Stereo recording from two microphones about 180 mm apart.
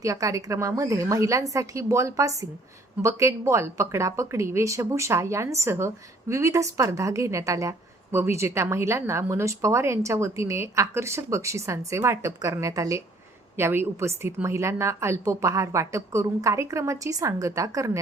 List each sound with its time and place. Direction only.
0.0 s speech: 20° right (ahead or behind)